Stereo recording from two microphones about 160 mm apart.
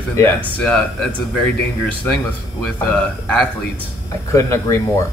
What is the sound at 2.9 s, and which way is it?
Speech, 5° left (ahead or behind).